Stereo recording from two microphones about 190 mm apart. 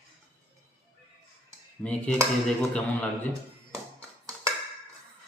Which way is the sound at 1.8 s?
5° left (ahead or behind).